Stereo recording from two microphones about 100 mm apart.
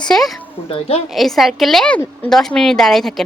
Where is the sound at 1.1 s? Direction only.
Centre (ahead or behind).